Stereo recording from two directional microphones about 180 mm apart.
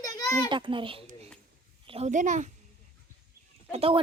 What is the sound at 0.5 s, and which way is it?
A child's voice, 25° right (ahead or behind).